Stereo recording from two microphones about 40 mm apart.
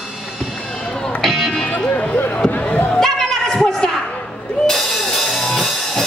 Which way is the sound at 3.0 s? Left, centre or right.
Centre.